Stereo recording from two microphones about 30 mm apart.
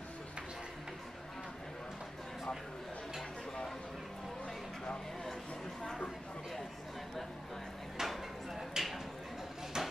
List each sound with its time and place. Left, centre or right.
8.0 s chopping: centre
8.5 s a sound: centre
9.8 s hammer: centre